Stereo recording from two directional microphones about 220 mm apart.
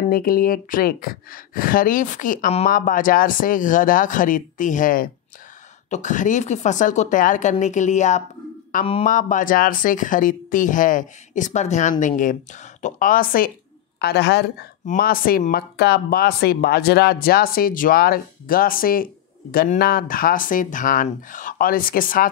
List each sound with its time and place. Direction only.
0.1 s speech: 40° left (ahead or behind)